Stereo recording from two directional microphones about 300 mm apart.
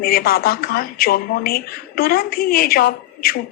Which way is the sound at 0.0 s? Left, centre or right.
Left.